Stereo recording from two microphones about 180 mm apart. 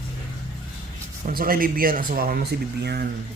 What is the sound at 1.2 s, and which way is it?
Speech, 55° right (ahead or behind).